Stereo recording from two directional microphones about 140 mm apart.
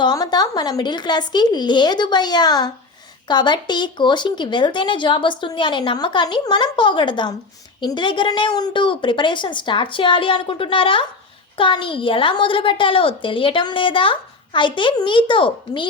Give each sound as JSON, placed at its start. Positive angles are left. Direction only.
{"t": 0.0, "sound": "a woman's voice", "side_deg": 30}